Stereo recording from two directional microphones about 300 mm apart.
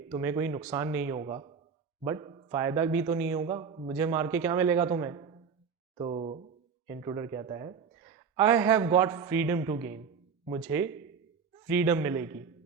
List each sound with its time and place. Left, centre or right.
0.1 s a man's voice: centre